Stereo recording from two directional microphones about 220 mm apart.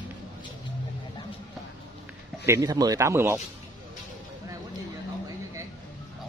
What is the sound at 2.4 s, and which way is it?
Speech, 15° right (ahead or behind).